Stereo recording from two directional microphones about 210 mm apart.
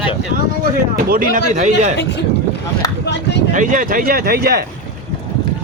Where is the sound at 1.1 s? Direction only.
40° right (ahead or behind).